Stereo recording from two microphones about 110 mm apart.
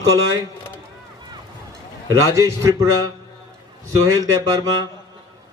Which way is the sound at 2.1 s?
30° right (ahead or behind).